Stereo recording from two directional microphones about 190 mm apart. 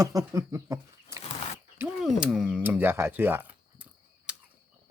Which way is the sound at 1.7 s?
5° right (ahead or behind).